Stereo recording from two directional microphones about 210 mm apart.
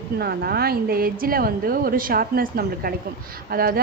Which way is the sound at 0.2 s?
50° right (ahead or behind).